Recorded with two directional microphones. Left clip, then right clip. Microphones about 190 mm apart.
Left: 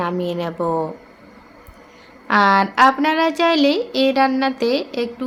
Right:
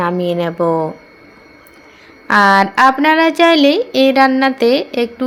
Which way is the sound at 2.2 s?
20° right (ahead or behind).